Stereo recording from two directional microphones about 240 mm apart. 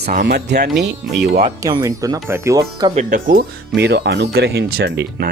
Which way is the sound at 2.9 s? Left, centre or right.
Right.